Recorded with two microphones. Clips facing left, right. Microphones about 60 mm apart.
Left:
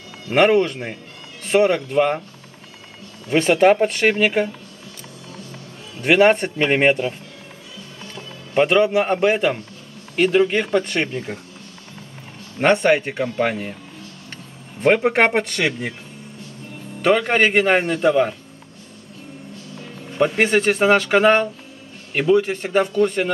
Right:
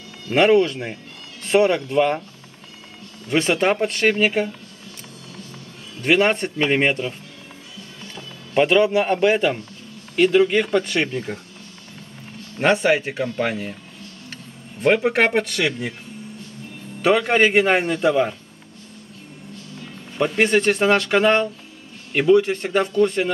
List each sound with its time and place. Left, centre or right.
0.3 s speech: left
0.7 s speech: centre
3.3 s speech: centre
6.0 s speech: centre
8.1 s music: centre
9.1 s a man's voice: centre
12.6 s a man's voice: centre
14.8 s speech: centre
17.0 s a man's voice: centre
20.2 s speech: centre